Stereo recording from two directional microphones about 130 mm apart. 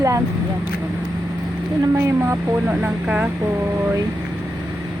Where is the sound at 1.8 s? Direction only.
20° right (ahead or behind).